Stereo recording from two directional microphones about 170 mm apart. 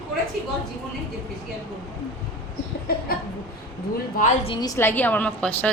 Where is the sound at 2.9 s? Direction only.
65° left (ahead or behind).